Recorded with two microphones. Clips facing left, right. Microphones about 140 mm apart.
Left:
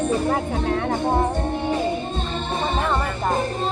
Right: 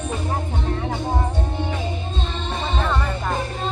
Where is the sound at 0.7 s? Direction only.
65° left (ahead or behind).